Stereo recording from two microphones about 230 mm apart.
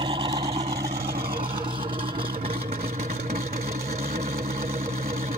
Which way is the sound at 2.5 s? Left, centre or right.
Right.